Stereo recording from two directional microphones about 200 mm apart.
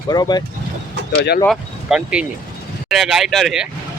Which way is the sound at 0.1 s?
20° left (ahead or behind).